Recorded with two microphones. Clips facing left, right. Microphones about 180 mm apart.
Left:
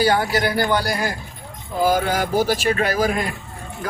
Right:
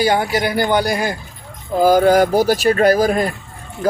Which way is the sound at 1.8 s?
40° right (ahead or behind).